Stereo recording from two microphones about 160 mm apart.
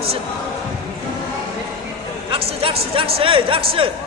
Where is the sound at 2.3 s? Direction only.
35° right (ahead or behind).